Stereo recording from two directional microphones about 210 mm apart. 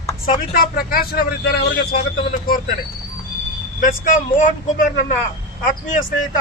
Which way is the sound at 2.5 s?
45° left (ahead or behind).